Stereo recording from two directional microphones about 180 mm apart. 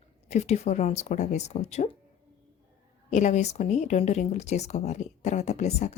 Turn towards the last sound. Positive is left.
turn(degrees=40)  # may be behind; listen again after turning